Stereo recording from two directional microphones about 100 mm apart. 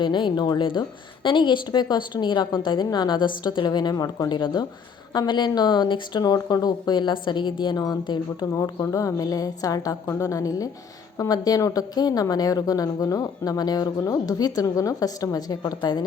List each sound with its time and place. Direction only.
0.0 s a woman's voice: 50° left (ahead or behind)
8.5 s a woman's voice: 35° left (ahead or behind)